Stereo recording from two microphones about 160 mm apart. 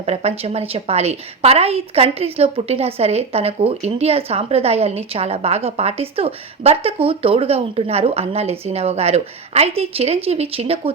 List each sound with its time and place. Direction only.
0.0 s a woman's voice: 40° right (ahead or behind)